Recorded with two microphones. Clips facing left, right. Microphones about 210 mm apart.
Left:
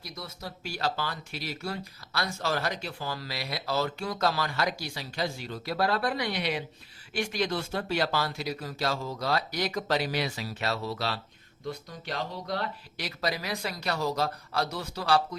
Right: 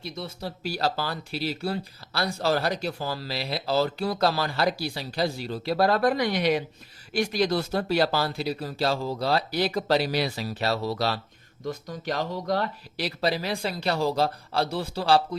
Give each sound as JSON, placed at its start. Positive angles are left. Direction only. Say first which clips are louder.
{"t": 0.0, "sound": "speech", "louder": "right 6 dB", "side_deg": -30}
{"t": 13.0, "sound": "speech", "louder": "right 6 dB", "side_deg": -30}